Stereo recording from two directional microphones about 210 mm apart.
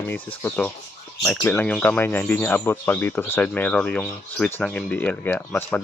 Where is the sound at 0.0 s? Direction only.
10° left (ahead or behind).